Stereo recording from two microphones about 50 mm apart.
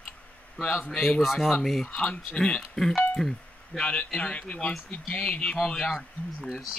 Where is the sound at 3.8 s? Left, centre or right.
Left.